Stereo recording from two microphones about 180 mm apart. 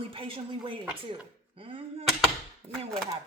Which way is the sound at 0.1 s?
30° right (ahead or behind).